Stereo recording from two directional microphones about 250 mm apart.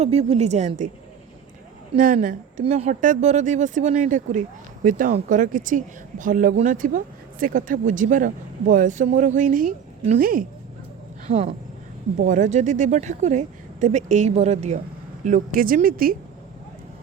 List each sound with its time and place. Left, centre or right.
0.0 s speech: right
1.9 s a woman's voice: right